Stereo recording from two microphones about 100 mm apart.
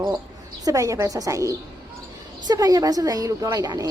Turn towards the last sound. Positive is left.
turn(degrees=-45)  # may be behind; listen again after turning